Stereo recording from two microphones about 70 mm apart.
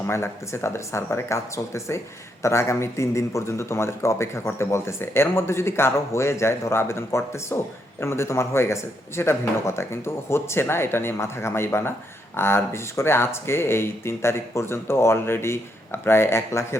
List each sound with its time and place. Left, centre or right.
0.1 s a man's voice: left